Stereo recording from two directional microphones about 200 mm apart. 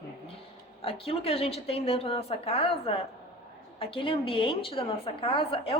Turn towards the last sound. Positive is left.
turn(degrees=25)  # may be behind; listen again after turning